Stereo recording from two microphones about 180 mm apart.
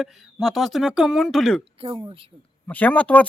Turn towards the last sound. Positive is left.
turn(degrees=10)  # may be behind; listen again after turning